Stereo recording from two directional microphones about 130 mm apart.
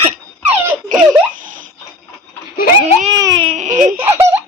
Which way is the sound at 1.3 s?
90° right.